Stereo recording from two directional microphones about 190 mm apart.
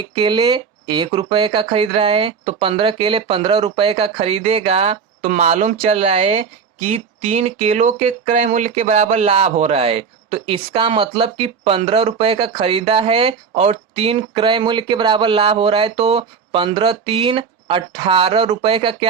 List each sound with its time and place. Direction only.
0.1 s speech: 25° right (ahead or behind)